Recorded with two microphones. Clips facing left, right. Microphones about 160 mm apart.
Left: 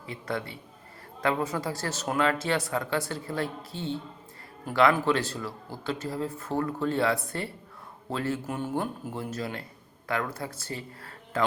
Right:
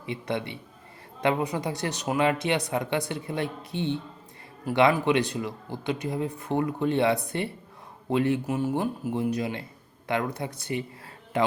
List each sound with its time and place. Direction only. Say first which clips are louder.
0.0 s a man's voice: right 3 dB; 20° right (ahead or behind)